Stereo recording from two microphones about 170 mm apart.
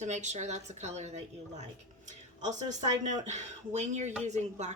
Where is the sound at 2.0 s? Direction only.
45° right (ahead or behind).